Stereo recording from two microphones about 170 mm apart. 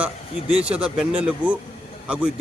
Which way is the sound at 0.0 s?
5° right (ahead or behind).